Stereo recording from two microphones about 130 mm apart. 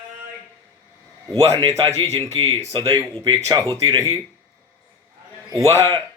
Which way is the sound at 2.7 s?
40° right (ahead or behind).